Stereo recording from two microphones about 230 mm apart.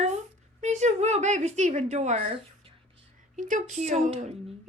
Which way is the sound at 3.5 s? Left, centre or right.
Right.